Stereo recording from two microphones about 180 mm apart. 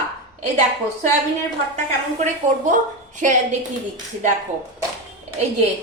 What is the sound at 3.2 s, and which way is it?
Speech, 45° right (ahead or behind).